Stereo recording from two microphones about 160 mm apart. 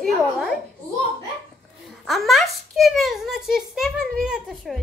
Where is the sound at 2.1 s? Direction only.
Centre (ahead or behind).